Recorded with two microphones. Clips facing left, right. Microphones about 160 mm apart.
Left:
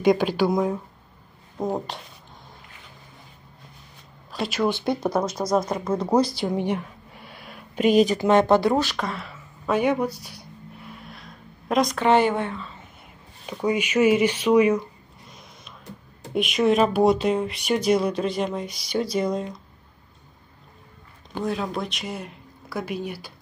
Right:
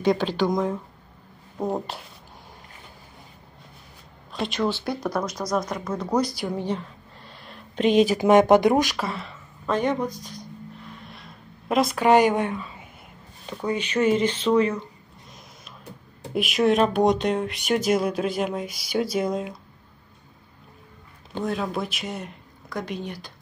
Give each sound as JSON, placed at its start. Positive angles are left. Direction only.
{"t": 0.0, "sound": "speech", "side_deg": 10}
{"t": 1.6, "sound": "speech", "side_deg": -5}
{"t": 4.3, "sound": "speech", "side_deg": 5}
{"t": 4.6, "sound": "speech", "side_deg": 20}
{"t": 8.2, "sound": "speech", "side_deg": -15}
{"t": 11.0, "sound": "a sound", "side_deg": 0}
{"t": 13.5, "sound": "speech", "side_deg": 10}
{"t": 15.2, "sound": "a sound", "side_deg": 0}
{"t": 16.3, "sound": "speech", "side_deg": 0}
{"t": 21.5, "sound": "speech", "side_deg": 0}